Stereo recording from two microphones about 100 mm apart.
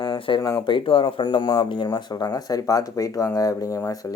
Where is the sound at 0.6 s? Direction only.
55° left (ahead or behind).